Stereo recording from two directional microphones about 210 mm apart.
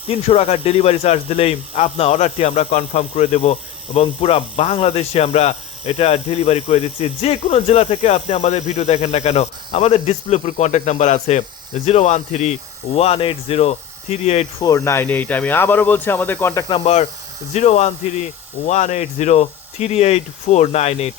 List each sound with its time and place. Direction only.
0.1 s speech: 30° left (ahead or behind)
14.6 s speech: 15° left (ahead or behind)
16.6 s speech: 25° left (ahead or behind)